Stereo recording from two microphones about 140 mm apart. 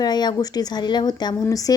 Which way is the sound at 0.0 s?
30° left (ahead or behind).